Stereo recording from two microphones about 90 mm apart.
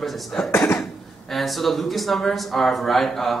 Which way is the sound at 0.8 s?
Centre (ahead or behind).